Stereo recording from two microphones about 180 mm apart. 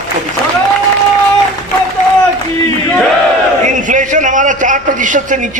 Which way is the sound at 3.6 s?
45° right (ahead or behind).